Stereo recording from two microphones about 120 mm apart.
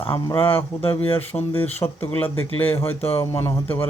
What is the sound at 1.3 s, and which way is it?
Speech, 15° left (ahead or behind).